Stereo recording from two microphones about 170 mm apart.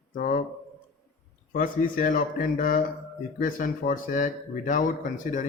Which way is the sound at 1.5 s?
50° left (ahead or behind).